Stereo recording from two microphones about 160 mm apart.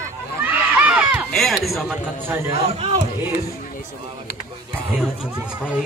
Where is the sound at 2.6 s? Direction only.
40° right (ahead or behind).